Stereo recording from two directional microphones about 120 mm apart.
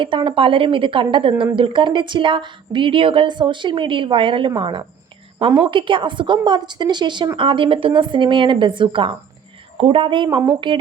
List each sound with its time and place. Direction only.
0.0 s a woman's voice: 45° right (ahead or behind)
10.2 s speech: 20° right (ahead or behind)